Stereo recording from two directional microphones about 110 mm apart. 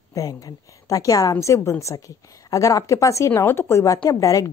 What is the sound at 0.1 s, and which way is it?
A woman's voice, 35° left (ahead or behind).